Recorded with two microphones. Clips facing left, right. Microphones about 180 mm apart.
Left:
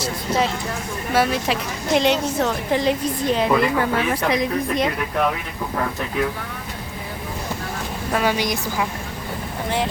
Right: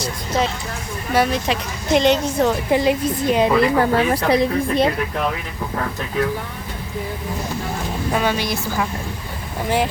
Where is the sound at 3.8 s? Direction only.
35° right (ahead or behind).